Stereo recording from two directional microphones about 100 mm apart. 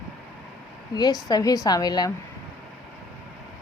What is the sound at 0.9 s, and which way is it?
A woman's voice, 40° left (ahead or behind).